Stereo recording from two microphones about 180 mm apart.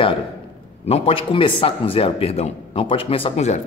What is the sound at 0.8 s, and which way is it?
Speech, 35° left (ahead or behind).